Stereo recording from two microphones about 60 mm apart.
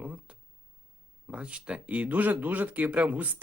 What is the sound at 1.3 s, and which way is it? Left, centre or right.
Speech, centre.